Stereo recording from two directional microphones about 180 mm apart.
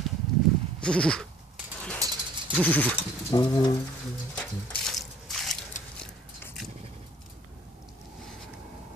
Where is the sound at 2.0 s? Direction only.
20° right (ahead or behind).